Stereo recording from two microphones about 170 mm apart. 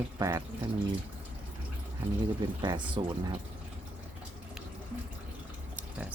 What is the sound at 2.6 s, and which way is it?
Speech, 25° right (ahead or behind).